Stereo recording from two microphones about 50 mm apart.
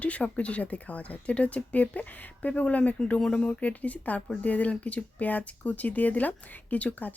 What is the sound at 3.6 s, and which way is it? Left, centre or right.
Speech, left.